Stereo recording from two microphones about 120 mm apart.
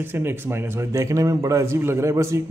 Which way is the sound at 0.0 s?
20° right (ahead or behind).